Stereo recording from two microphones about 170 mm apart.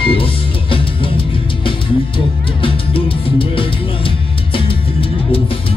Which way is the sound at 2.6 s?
30° left (ahead or behind).